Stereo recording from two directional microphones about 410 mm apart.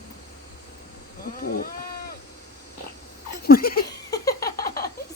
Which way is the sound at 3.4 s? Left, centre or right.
Left.